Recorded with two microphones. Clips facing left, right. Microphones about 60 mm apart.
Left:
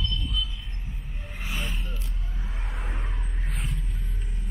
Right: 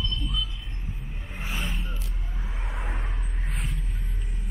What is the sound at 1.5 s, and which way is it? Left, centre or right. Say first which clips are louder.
Vehicle: right 1 dB; centre.